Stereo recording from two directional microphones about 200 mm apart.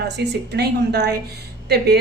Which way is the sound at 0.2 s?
55° right (ahead or behind).